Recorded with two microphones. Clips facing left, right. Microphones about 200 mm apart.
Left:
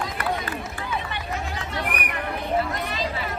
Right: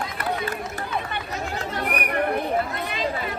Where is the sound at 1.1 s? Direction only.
50° right (ahead or behind).